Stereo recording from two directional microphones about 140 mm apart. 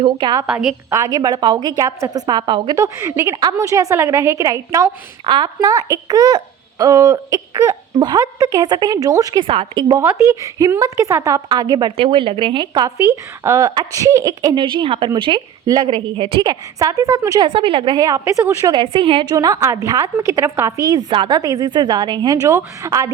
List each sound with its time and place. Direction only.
0.0 s a woman's voice: 35° right (ahead or behind)
0.4 s a woman's voice: 5° right (ahead or behind)
0.9 s speech: 25° right (ahead or behind)
5.2 s speech: 35° right (ahead or behind)
9.4 s a woman's voice: 40° right (ahead or behind)
9.9 s a woman's voice: 20° right (ahead or behind)
18.8 s speech: 40° right (ahead or behind)
22.4 s speech: 20° right (ahead or behind)